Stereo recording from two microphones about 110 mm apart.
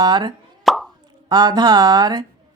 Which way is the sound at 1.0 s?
40° right (ahead or behind).